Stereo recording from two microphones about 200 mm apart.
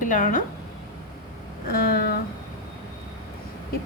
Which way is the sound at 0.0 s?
40° left (ahead or behind).